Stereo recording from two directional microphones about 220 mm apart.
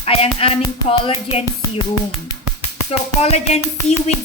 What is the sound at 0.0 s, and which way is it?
Music, 25° left (ahead or behind).